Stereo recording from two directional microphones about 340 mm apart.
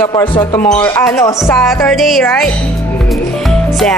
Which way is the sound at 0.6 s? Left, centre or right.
Left.